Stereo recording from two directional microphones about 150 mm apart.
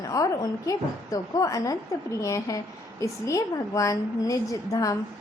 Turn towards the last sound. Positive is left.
turn(degrees=25)  # may be behind; listen again after turning